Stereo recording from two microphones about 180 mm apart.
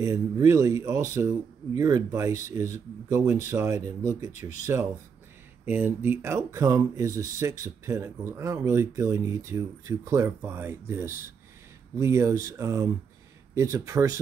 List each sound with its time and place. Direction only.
0.0 s speech: 20° right (ahead or behind)